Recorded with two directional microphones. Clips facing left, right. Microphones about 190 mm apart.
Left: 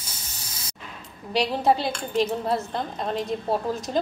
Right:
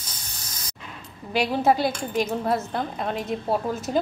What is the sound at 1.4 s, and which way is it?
A woman's voice, 5° right (ahead or behind).